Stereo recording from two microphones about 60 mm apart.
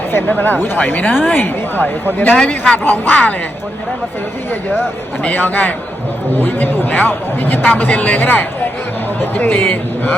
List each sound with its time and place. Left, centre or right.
0.3 s speech: left
2.7 s speech: left
5.2 s speech: left